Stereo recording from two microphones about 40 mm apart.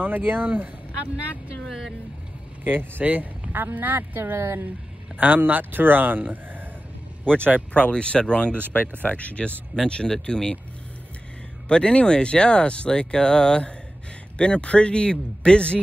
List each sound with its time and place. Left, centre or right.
0.0 s speech: right
1.7 s speech: centre
2.6 s speech: right
4.2 s speech: right
5.2 s speech: right
7.7 s speech: left
9.0 s speech: left
9.8 s speech: left
11.7 s speech: left